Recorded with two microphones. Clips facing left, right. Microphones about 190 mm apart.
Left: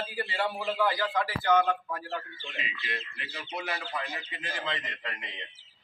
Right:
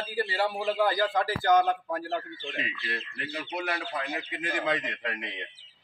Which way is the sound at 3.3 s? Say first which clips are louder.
Right 3 dB; 55° right (ahead or behind).